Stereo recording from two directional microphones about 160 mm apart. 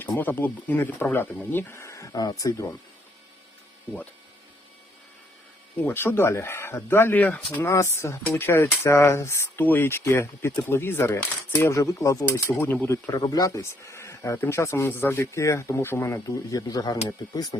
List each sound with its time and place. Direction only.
0.0 s speech: 10° left (ahead or behind)
5.7 s speech: 10° left (ahead or behind)